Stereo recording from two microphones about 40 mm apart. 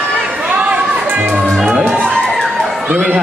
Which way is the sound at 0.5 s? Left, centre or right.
Right.